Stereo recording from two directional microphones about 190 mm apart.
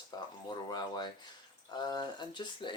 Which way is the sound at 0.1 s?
20° left (ahead or behind).